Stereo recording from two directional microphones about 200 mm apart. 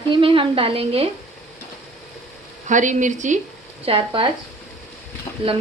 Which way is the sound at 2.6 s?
40° right (ahead or behind).